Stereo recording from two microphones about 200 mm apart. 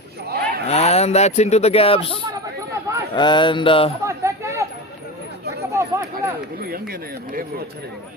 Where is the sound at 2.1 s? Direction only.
20° right (ahead or behind).